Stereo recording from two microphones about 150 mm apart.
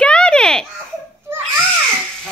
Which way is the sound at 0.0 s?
5° left (ahead or behind).